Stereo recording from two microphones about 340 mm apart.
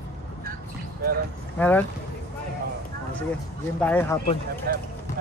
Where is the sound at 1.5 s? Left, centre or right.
Centre.